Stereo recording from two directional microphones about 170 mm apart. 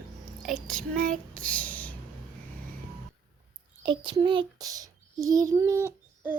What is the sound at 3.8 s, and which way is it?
A child's voice, 30° right (ahead or behind).